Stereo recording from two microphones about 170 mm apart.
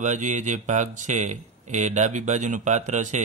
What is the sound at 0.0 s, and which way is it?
Speech, 45° right (ahead or behind).